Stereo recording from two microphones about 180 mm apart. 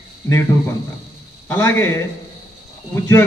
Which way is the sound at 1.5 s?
15° left (ahead or behind).